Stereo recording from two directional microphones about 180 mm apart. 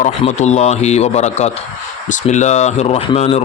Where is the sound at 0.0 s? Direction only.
40° left (ahead or behind).